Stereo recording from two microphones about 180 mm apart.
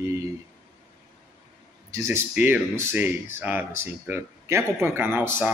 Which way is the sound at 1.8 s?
15° right (ahead or behind).